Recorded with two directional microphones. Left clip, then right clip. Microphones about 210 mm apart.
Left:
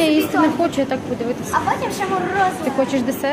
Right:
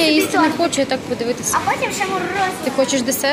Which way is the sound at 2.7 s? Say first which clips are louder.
Right 2 dB; centre (ahead or behind).